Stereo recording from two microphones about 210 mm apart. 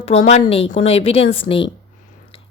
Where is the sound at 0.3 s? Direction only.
30° left (ahead or behind).